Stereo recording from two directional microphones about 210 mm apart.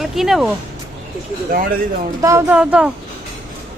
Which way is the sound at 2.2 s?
10° right (ahead or behind).